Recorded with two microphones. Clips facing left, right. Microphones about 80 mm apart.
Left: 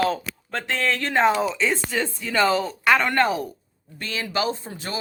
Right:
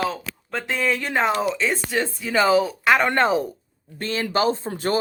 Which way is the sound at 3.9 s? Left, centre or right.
Right.